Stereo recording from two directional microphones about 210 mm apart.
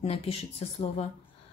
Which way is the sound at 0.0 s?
30° left (ahead or behind).